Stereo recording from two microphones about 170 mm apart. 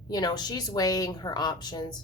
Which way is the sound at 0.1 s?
25° left (ahead or behind).